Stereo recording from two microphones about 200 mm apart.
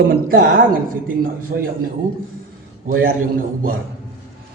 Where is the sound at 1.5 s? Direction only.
55° right (ahead or behind).